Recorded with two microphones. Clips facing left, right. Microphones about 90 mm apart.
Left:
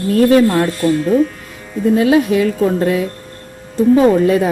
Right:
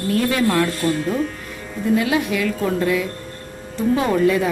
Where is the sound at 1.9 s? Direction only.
35° left (ahead or behind).